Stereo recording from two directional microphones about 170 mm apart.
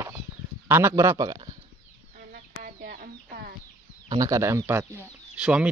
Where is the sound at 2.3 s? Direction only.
60° right (ahead or behind).